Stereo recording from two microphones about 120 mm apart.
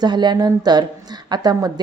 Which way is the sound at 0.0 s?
40° right (ahead or behind).